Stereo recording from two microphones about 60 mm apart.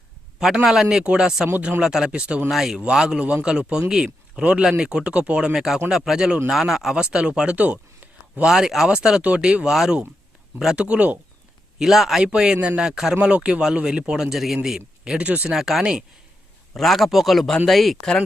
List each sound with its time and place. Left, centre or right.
0.3 s a man's voice: centre
2.5 s a man's voice: centre
5.5 s a man's voice: centre; by 8.4 s right
8.4 s a man's voice: centre
10.8 s speech: right
11.8 s a man's voice: centre
12.8 s a man's voice: centre
13.1 s a man's voice: centre
14.8 s speech: centre
15.5 s a man's voice: centre
15.8 s a man's voice: centre
16.7 s a man's voice: centre